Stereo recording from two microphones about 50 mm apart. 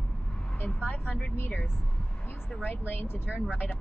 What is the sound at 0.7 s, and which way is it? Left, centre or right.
Speech, left.